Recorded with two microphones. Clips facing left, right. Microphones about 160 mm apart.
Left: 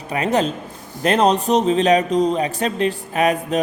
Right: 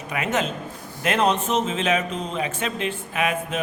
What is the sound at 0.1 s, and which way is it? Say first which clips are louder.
Speech: left 6 dB; 35° left (ahead or behind).